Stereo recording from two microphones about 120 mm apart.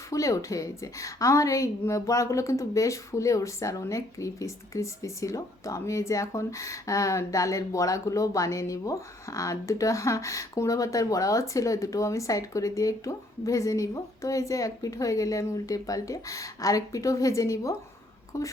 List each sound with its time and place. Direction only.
0.1 s a woman's voice: 25° left (ahead or behind)